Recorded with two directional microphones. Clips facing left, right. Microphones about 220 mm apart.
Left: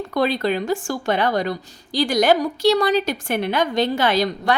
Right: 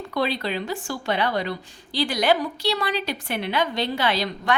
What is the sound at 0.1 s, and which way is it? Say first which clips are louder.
A woman's voice: left 5 dB; 45° left (ahead or behind).